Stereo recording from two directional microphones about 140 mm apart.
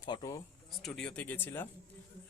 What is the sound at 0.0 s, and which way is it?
Speech, 30° left (ahead or behind).